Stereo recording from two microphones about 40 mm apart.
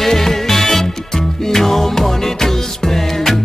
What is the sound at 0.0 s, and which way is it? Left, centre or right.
Music, centre.